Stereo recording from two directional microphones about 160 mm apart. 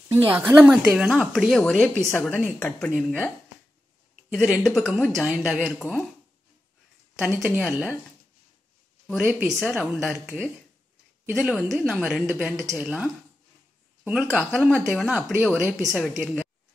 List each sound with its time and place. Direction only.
0.1 s a woman's voice: 15° right (ahead or behind)
4.3 s a woman's voice: centre (ahead or behind)
7.2 s speech: 10° right (ahead or behind)
9.0 s a woman's voice: 5° right (ahead or behind)
12.5 s speech: 20° right (ahead or behind)
12.8 s a woman's voice: 5° right (ahead or behind)
15.3 s speech: 15° right (ahead or behind)
16.2 s a woman's voice: centre (ahead or behind)